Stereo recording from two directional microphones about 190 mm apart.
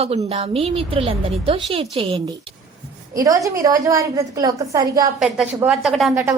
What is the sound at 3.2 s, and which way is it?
A woman's voice, 20° right (ahead or behind).